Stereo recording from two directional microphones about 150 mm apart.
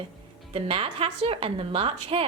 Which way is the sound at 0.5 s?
35° right (ahead or behind).